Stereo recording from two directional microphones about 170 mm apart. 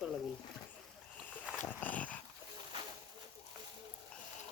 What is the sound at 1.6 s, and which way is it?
Dog, 10° left (ahead or behind).